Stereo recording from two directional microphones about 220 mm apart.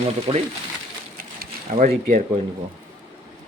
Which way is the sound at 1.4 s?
40° right (ahead or behind).